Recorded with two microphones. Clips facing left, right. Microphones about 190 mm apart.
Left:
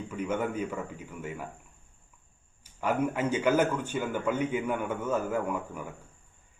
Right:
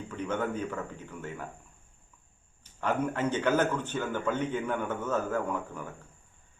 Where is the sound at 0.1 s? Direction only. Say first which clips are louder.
Left 1 dB; 10° left (ahead or behind).